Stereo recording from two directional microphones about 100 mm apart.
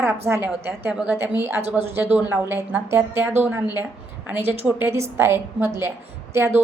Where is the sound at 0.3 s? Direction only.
25° right (ahead or behind).